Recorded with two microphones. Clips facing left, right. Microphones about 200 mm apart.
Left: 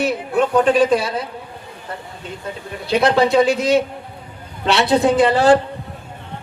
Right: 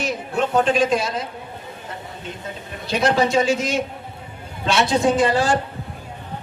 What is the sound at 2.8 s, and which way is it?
A man's voice, 60° left (ahead or behind).